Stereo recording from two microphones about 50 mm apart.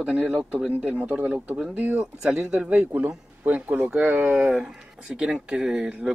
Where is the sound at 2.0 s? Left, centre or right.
Centre.